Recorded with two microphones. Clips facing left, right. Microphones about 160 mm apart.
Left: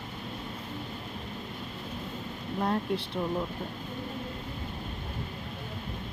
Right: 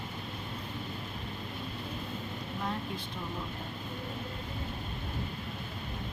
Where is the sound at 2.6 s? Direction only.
65° left (ahead or behind).